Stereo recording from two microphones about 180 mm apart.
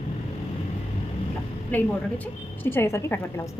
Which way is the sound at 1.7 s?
10° left (ahead or behind).